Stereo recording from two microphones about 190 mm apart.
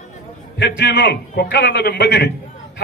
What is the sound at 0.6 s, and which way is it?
A man's voice, 60° left (ahead or behind).